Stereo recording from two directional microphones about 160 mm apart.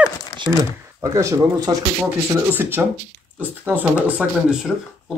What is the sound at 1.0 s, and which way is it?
A woman's voice, 20° right (ahead or behind).